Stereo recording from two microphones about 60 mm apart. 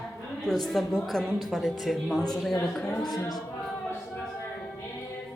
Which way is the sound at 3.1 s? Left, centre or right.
Left.